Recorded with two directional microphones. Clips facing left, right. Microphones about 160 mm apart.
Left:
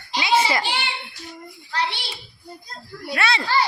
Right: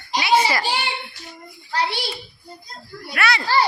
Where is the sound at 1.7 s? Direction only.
40° right (ahead or behind).